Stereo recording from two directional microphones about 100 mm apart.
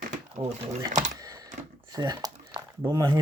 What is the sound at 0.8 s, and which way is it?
Keys jangling, 40° right (ahead or behind).